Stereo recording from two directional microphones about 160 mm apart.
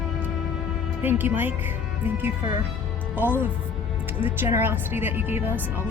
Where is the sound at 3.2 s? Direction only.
10° right (ahead or behind).